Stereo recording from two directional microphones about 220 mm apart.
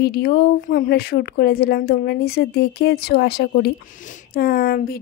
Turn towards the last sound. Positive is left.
turn(degrees=45)  # may be behind; listen again after turning